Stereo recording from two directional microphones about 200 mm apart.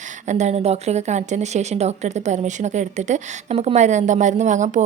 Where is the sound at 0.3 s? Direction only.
35° right (ahead or behind).